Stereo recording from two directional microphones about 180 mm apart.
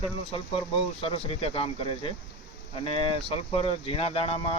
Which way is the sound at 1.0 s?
30° left (ahead or behind).